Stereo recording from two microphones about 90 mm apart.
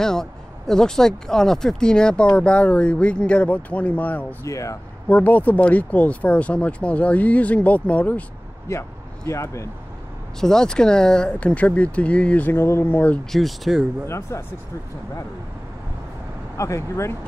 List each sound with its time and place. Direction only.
0.0 s speech: 5° left (ahead or behind)
4.5 s speech: 35° left (ahead or behind)
5.0 s speech: 15° left (ahead or behind)
8.6 s speech: 35° left (ahead or behind)
10.4 s speech: 5° left (ahead or behind)
13.3 s speech: centre (ahead or behind)
14.0 s speech: 30° left (ahead or behind)
16.5 s speech: 35° left (ahead or behind)